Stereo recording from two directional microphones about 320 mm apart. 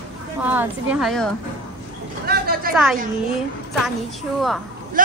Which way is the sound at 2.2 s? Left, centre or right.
Right.